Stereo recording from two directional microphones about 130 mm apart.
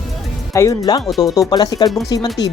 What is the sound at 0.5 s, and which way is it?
Speech, 25° left (ahead or behind).